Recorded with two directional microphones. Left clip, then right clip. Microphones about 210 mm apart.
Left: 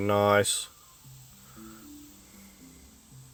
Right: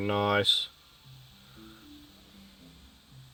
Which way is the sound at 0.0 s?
20° left (ahead or behind).